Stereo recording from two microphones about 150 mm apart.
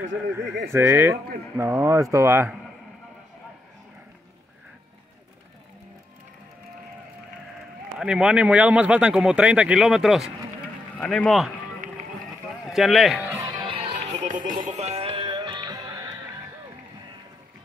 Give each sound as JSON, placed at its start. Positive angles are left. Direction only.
{"t": 0.4, "sound": "speech", "side_deg": -20}
{"t": 8.0, "sound": "speech", "side_deg": -5}
{"t": 12.6, "sound": "speech", "side_deg": 0}
{"t": 13.2, "sound": "music", "side_deg": -15}
{"t": 13.7, "sound": "music", "side_deg": -35}
{"t": 14.0, "sound": "music", "side_deg": -55}